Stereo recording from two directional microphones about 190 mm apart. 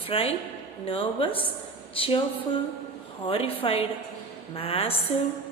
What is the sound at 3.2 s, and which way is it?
A woman's voice, 30° left (ahead or behind).